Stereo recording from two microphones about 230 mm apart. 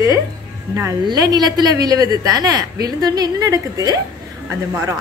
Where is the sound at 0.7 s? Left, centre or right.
Centre.